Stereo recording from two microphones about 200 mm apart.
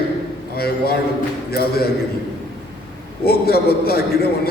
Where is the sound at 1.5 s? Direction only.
50° left (ahead or behind).